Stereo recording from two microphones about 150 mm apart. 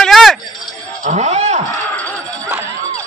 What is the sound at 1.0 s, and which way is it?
Speech, 50° right (ahead or behind).